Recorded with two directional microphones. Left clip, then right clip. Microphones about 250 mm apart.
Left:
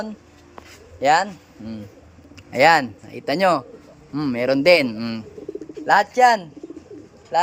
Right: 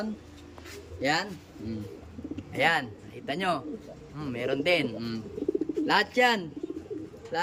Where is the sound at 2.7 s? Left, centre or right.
Left.